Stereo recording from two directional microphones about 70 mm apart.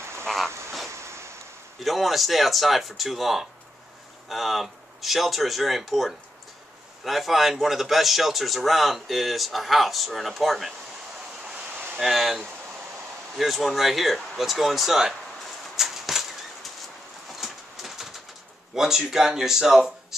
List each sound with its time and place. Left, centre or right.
0.0 s duck: right
1.8 s a man's voice: centre
11.4 s a sound: centre
12.0 s a man's voice: centre
15.7 s a sound: centre
17.4 s bird: centre
18.8 s speech: centre